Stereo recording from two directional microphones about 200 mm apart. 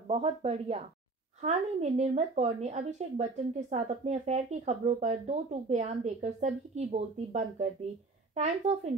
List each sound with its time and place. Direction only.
0.1 s speech: 30° right (ahead or behind)